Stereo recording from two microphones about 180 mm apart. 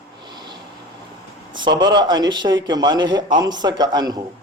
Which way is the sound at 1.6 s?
25° right (ahead or behind).